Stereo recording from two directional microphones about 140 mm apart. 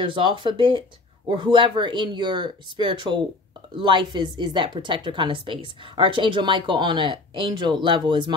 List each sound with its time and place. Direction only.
0.0 s speech: 35° right (ahead or behind)